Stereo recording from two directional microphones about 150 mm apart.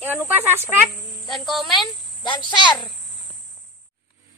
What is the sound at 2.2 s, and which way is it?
Speech, 30° left (ahead or behind).